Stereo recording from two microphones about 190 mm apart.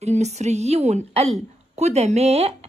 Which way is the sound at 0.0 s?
35° right (ahead or behind).